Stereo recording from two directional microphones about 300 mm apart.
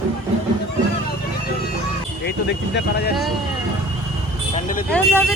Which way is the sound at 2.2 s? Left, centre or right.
Left.